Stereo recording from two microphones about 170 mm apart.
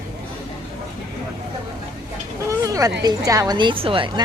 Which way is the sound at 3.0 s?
20° right (ahead or behind).